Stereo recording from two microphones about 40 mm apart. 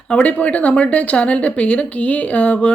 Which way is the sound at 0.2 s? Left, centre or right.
Left.